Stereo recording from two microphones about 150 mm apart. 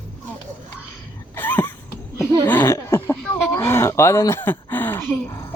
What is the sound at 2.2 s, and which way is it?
Speech, 15° left (ahead or behind).